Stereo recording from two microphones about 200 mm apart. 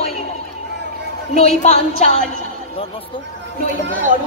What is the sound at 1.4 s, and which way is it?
Speech, 35° left (ahead or behind).